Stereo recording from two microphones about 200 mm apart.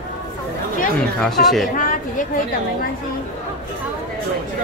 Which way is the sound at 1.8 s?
45° left (ahead or behind).